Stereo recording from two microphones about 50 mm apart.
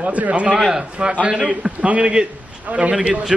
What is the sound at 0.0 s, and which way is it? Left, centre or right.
A man's voice, right.